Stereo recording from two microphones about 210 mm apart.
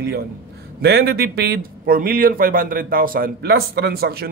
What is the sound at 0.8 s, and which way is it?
Speech, 50° right (ahead or behind).